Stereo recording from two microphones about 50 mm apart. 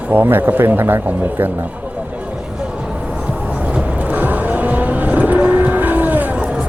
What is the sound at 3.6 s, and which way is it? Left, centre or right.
Vehicle, right.